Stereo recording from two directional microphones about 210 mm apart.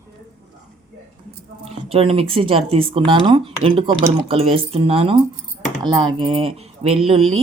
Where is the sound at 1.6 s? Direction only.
25° right (ahead or behind).